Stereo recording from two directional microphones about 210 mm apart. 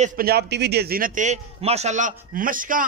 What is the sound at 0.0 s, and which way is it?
A man's voice, 40° right (ahead or behind).